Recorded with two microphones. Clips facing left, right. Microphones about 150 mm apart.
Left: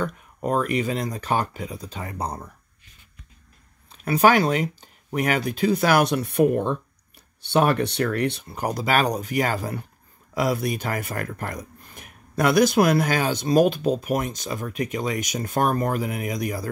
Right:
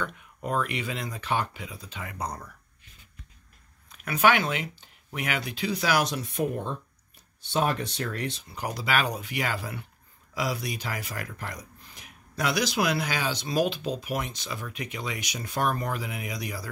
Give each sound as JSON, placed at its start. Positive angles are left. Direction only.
{"t": 0.0, "sound": "speech", "side_deg": 40}
{"t": 3.9, "sound": "speech", "side_deg": 35}
{"t": 10.3, "sound": "speech", "side_deg": 50}